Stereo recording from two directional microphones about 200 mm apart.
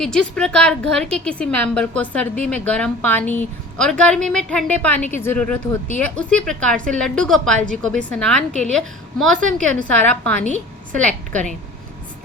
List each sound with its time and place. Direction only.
0.0 s a woman's voice: 5° left (ahead or behind)
11.3 s a woman's voice: 40° right (ahead or behind)